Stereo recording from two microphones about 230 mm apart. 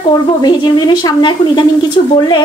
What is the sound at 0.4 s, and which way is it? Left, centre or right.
Speech, centre.